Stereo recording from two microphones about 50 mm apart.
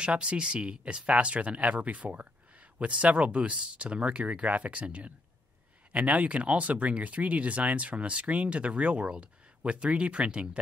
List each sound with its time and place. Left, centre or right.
0.0 s speech: right